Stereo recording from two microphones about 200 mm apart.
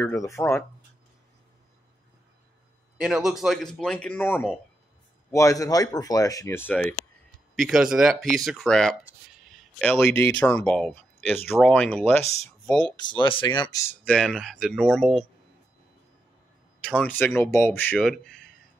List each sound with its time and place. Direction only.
0.0 s speech: 15° left (ahead or behind)
3.0 s speech: centre (ahead or behind)
12.9 s speech: 20° left (ahead or behind)
14.0 s speech: 5° left (ahead or behind)
16.8 s speech: 5° left (ahead or behind)